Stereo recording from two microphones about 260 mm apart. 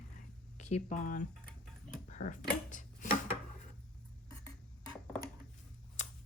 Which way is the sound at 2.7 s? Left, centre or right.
Left.